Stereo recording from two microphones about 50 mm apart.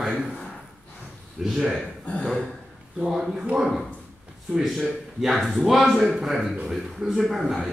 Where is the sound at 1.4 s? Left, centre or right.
Centre.